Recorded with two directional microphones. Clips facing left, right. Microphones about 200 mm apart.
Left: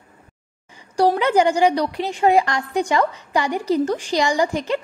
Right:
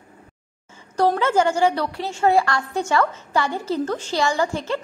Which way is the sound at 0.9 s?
10° left (ahead or behind).